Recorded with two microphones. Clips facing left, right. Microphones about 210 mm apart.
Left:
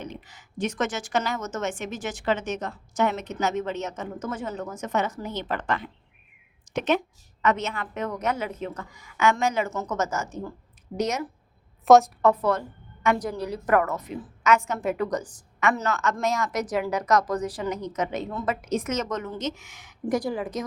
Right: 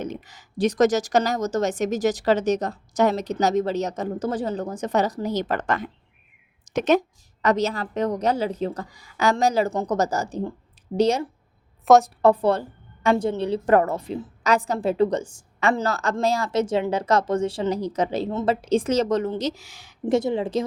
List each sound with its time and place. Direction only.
0.0 s a woman's voice: 40° right (ahead or behind)
11.9 s a woman's voice: centre (ahead or behind)
12.2 s a woman's voice: 30° right (ahead or behind)